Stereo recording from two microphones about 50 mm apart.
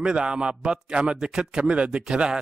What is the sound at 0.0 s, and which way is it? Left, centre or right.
A man's voice, centre.